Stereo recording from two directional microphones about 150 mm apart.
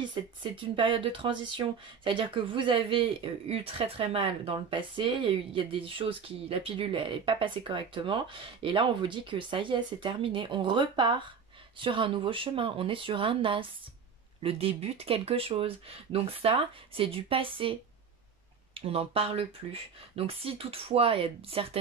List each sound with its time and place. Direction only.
0.1 s speech: 35° right (ahead or behind)
18.8 s speech: 40° right (ahead or behind)